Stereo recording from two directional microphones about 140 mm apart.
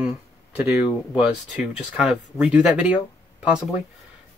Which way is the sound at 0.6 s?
10° right (ahead or behind).